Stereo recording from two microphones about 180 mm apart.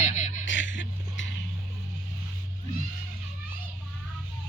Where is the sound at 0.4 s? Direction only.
90° left.